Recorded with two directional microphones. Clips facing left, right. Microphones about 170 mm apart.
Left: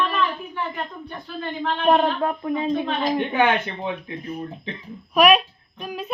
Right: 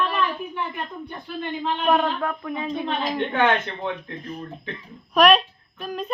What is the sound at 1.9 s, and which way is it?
Speech, 25° left (ahead or behind).